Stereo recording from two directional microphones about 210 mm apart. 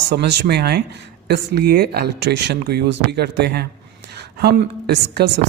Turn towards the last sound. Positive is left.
turn(degrees=-55)  # may be behind; listen again after turning